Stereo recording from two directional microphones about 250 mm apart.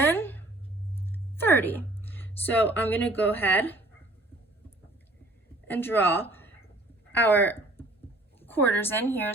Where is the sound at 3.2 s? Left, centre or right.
Centre.